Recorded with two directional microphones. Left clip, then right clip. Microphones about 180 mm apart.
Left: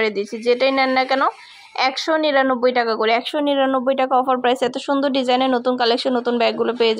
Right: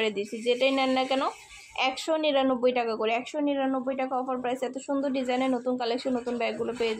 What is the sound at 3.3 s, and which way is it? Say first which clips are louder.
Speech: left 10 dB; 60° left (ahead or behind).